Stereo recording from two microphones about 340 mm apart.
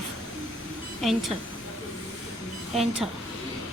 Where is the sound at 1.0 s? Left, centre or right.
Centre.